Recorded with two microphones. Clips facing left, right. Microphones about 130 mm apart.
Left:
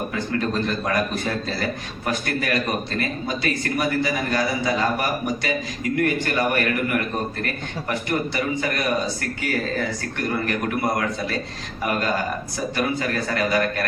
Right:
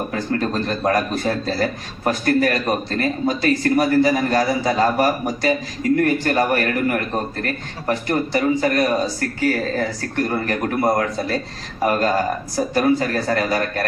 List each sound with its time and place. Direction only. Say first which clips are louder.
0.1 s a man's voice: right 2 dB; 35° right (ahead or behind)